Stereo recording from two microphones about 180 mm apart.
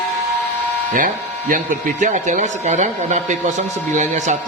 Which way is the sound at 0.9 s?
50° right (ahead or behind).